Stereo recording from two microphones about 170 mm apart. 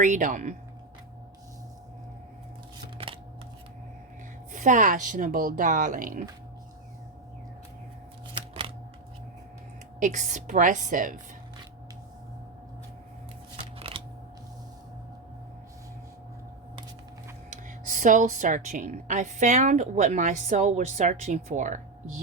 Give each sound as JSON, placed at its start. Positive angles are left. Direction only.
{"t": 0.0, "sound": "a woman's voice", "side_deg": -50}
{"t": 4.5, "sound": "a woman's voice", "side_deg": -45}
{"t": 10.0, "sound": "a woman's voice", "side_deg": -45}
{"t": 13.7, "sound": "scissors", "side_deg": -35}
{"t": 17.5, "sound": "a woman's voice", "side_deg": -50}